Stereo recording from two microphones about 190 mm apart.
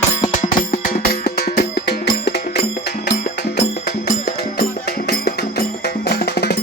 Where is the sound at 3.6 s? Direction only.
45° left (ahead or behind).